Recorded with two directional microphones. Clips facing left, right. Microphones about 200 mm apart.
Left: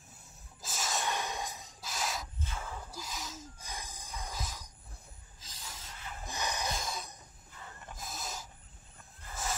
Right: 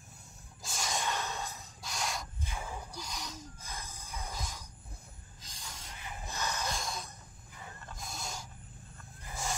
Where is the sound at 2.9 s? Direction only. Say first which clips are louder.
Even; 5° left (ahead or behind).